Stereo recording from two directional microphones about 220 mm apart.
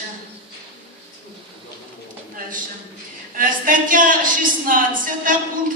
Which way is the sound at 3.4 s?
40° right (ahead or behind).